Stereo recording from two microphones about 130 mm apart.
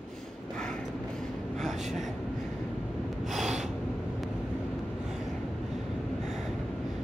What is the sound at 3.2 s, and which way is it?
Gasp, centre (ahead or behind).